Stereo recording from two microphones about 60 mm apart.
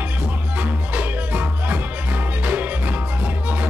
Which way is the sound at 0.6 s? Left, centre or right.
Right.